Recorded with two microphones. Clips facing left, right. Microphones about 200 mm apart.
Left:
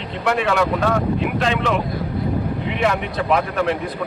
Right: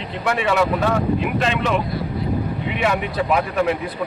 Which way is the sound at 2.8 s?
5° right (ahead or behind).